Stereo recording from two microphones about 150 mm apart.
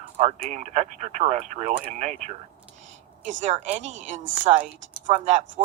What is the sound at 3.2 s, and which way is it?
Speech, 45° right (ahead or behind).